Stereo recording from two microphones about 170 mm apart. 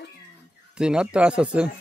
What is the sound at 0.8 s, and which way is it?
Speech, 5° right (ahead or behind).